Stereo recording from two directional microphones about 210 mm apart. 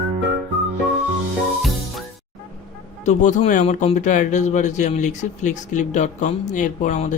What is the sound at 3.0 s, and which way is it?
Speech, 35° left (ahead or behind).